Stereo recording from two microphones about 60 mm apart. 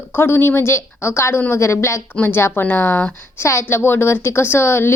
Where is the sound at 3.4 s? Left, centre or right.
Left.